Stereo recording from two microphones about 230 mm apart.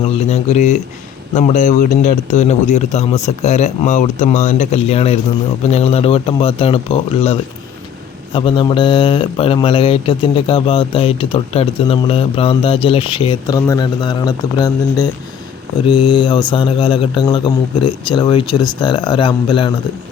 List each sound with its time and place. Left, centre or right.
0.2 s speech: left